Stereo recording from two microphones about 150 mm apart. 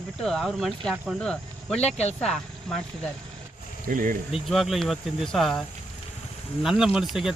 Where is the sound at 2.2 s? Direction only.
5° left (ahead or behind).